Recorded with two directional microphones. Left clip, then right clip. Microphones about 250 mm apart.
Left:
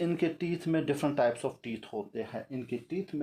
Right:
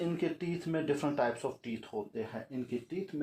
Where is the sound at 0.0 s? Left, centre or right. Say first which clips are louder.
Left 4 dB; left.